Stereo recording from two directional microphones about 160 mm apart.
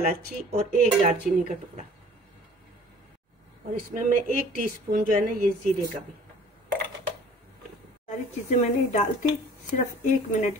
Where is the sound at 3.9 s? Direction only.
65° right (ahead or behind).